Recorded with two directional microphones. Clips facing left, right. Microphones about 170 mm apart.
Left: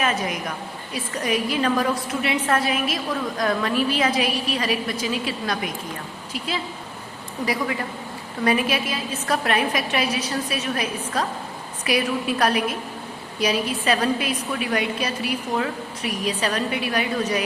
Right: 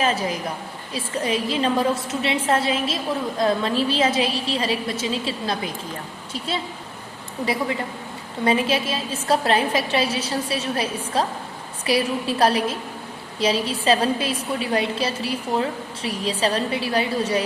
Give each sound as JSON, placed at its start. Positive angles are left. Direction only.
{"t": 0.0, "sound": "a woman's voice", "side_deg": -30}